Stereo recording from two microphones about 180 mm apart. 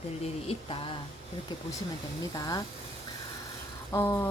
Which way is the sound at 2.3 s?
20° left (ahead or behind).